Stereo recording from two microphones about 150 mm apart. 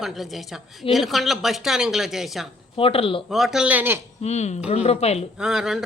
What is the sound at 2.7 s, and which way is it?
Speech, 40° left (ahead or behind).